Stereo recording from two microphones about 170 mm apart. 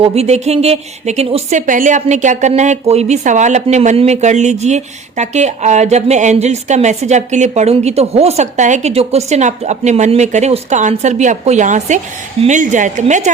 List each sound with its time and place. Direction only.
0.0 s a woman's voice: 40° right (ahead or behind)